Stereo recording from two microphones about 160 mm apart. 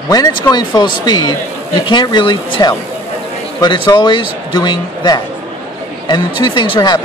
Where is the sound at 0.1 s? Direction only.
25° left (ahead or behind).